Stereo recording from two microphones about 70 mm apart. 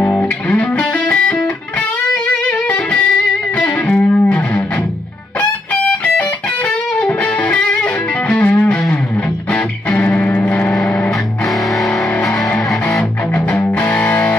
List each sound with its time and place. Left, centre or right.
0.1 s music: centre
9.8 s music: centre
11.4 s music: centre